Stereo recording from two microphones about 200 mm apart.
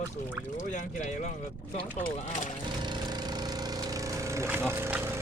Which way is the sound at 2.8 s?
20° right (ahead or behind).